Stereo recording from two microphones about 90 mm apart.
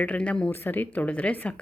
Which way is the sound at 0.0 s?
15° left (ahead or behind).